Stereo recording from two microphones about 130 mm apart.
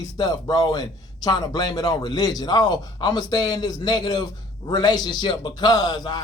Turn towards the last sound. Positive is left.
turn(degrees=35)  # may be behind; listen again after turning